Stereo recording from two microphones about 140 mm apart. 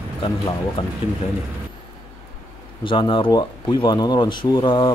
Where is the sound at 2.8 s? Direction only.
35° left (ahead or behind).